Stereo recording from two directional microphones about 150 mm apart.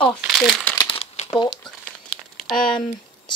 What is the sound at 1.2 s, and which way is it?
Crumpling, 30° left (ahead or behind).